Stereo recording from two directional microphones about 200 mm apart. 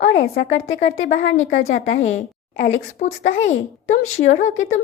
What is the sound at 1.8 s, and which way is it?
A woman's voice, 35° left (ahead or behind).